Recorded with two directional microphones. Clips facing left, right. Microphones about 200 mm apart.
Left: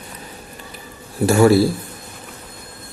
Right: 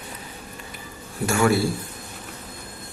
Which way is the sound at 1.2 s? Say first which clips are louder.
Left 8 dB; 35° left (ahead or behind).